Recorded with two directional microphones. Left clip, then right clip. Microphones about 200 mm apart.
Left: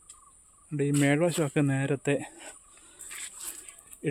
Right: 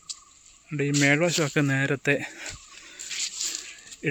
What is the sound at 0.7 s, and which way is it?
Speech, 5° left (ahead or behind).